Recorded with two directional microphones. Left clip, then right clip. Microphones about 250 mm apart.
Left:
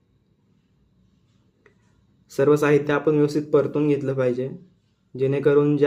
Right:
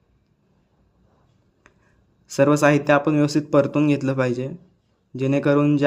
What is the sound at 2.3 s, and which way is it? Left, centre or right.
Speech, right.